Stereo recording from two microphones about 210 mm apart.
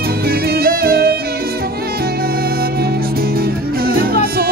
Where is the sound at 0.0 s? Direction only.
45° right (ahead or behind).